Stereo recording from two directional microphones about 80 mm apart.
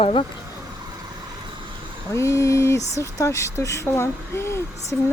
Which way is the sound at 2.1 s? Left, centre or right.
Left.